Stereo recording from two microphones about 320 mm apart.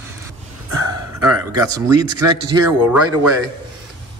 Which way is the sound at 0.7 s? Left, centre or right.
Right.